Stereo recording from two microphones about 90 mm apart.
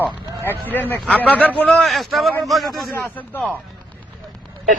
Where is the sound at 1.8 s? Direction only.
Centre (ahead or behind).